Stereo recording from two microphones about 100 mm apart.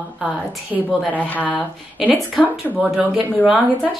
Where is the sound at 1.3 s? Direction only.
15° left (ahead or behind).